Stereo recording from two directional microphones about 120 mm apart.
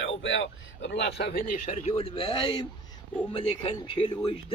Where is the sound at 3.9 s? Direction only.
45° left (ahead or behind).